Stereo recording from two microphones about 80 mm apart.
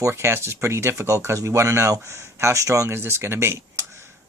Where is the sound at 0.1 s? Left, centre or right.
Right.